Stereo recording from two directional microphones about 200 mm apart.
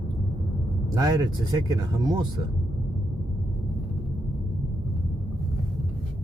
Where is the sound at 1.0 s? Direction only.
20° right (ahead or behind).